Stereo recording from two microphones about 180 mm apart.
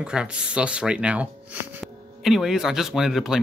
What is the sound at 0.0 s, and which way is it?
Speech, 5° right (ahead or behind).